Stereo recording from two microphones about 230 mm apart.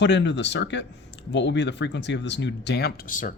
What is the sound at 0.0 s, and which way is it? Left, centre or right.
Speech, left.